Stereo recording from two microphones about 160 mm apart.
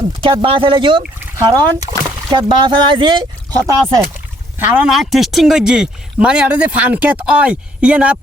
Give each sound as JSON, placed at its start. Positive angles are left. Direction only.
{"t": 0.2, "sound": "speech", "side_deg": -35}
{"t": 4.8, "sound": "speech", "side_deg": 0}